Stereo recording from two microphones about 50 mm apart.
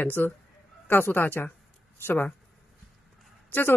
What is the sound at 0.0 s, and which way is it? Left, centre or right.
Speech, left.